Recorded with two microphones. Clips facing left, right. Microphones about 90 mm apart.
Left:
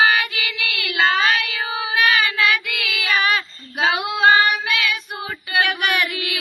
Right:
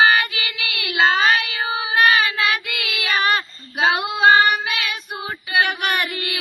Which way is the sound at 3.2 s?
40° right (ahead or behind).